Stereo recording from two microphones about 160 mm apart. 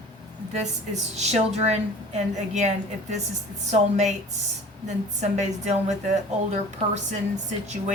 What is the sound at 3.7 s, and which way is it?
Speech, 45° right (ahead or behind).